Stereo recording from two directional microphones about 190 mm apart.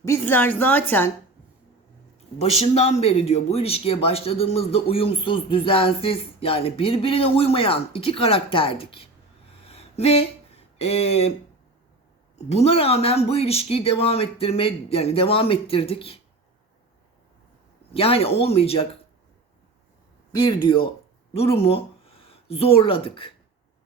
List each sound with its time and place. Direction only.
0.0 s a woman's voice: 15° left (ahead or behind)
2.4 s speech: 35° left (ahead or behind)
9.6 s a sound: 30° left (ahead or behind)
12.5 s speech: 35° left (ahead or behind)
17.9 s speech: 30° left (ahead or behind)
20.3 s speech: 25° left (ahead or behind)